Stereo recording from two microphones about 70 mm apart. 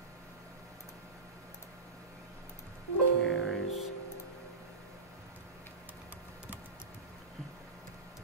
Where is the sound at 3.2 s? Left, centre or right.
Centre.